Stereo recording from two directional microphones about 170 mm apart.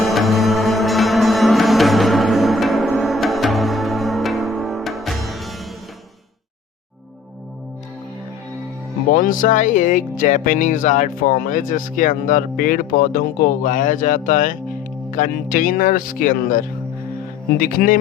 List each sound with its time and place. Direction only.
0.0 s music: centre (ahead or behind)
9.1 s speech: 50° left (ahead or behind)